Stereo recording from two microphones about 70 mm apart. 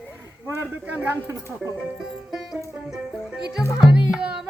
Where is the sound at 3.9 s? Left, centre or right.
Centre.